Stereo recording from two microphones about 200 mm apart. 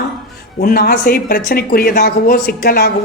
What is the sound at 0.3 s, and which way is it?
Speech, 50° left (ahead or behind).